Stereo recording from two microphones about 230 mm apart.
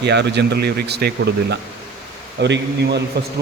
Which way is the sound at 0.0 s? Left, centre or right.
Right.